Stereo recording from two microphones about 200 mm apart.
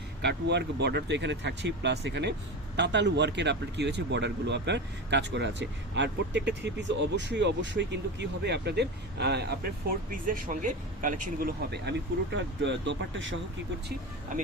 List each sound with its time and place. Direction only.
0.2 s speech: 60° right (ahead or behind)
10.1 s speech: 40° right (ahead or behind); by 13.4 s 70° right (ahead or behind)